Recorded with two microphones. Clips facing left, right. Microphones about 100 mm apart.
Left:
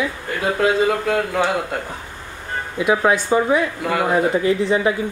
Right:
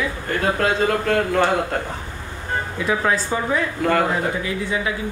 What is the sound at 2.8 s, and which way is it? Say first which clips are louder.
Speech: left 5 dB; 15° left (ahead or behind).